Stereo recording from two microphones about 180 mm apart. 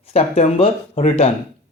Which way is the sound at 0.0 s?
35° left (ahead or behind).